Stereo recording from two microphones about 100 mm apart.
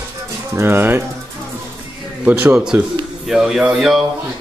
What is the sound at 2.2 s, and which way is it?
Speech, 15° right (ahead or behind).